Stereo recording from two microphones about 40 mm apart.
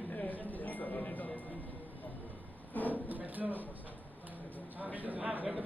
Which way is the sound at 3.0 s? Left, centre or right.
Right.